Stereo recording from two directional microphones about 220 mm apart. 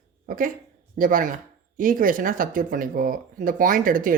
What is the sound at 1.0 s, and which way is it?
Speech, 40° right (ahead or behind).